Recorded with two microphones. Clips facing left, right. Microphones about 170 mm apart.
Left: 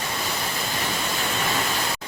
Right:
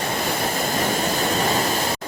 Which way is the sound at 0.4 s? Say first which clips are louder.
Right 6 dB; 45° right (ahead or behind).